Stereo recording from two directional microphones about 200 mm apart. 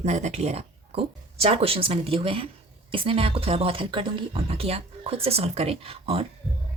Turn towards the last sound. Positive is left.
turn(degrees=-30)  # may be behind; listen again after turning